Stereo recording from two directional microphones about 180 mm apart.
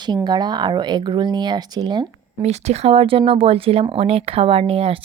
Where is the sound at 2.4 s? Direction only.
35° right (ahead or behind).